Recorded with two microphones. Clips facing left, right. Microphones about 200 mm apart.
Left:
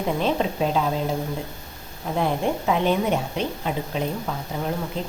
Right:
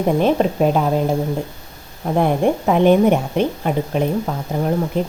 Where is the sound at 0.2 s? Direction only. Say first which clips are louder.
Right 7 dB; 55° right (ahead or behind).